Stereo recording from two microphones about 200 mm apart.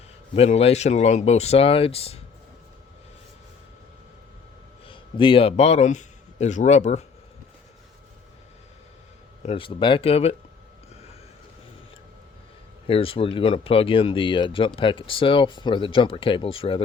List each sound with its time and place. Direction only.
0.3 s speech: 30° left (ahead or behind)
4.9 s speech: 25° left (ahead or behind)
9.5 s speech: 25° left (ahead or behind)
12.9 s speech: 25° left (ahead or behind)